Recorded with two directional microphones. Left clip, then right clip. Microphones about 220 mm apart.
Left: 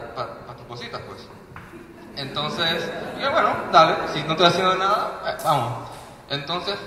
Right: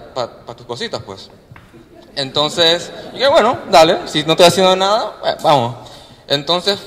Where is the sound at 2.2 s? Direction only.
25° right (ahead or behind).